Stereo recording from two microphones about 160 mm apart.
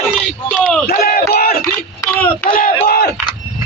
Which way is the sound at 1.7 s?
10° left (ahead or behind).